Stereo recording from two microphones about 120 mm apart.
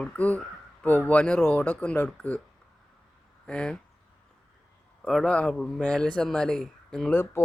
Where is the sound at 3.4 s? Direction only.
10° left (ahead or behind).